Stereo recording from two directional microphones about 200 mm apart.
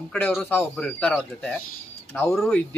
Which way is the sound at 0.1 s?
5° left (ahead or behind).